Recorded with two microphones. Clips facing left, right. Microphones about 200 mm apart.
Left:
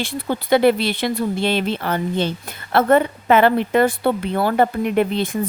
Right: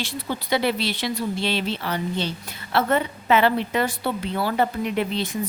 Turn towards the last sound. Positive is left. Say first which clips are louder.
# left 6 dB
turn(degrees=55)  # may be behind; listen again after turning